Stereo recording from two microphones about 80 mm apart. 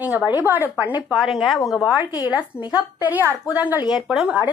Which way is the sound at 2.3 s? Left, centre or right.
Left.